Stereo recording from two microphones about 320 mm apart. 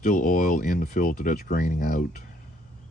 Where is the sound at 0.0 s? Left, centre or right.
Left.